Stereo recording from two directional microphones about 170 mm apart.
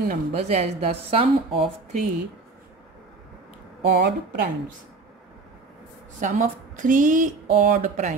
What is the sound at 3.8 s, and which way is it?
Speech, 85° right.